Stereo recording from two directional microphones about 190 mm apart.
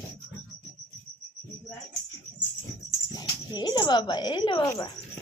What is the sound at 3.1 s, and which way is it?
A child's voice, 20° left (ahead or behind).